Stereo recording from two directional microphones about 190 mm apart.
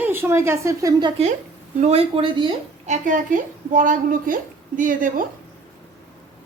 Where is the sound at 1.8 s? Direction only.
30° right (ahead or behind).